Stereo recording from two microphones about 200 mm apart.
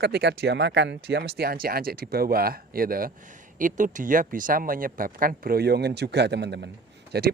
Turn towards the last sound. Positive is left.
turn(degrees=-55)  # may be behind; listen again after turning